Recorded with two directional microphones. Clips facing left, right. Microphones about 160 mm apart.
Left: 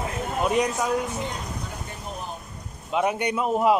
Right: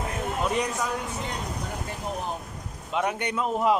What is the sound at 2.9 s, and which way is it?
Speech, 10° left (ahead or behind).